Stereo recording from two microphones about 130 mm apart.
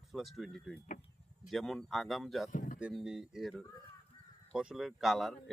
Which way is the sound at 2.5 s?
90° left.